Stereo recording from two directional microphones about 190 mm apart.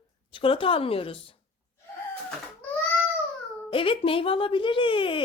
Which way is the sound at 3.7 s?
25° left (ahead or behind).